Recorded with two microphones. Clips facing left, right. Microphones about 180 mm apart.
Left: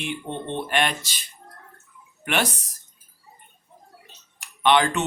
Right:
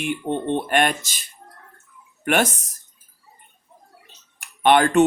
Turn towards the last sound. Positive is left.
turn(degrees=-50)  # may be behind; listen again after turning